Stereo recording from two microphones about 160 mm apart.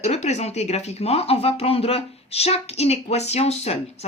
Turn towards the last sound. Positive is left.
turn(degrees=40)  # may be behind; listen again after turning